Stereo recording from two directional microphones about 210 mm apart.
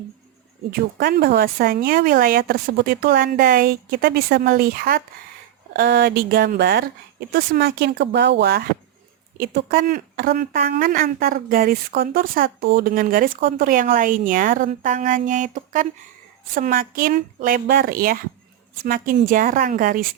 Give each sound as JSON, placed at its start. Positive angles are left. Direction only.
{"t": 0.7, "sound": "a woman's voice", "side_deg": -45}